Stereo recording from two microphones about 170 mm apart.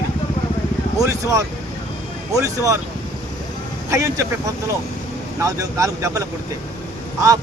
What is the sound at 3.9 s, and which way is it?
Speech, 20° right (ahead or behind).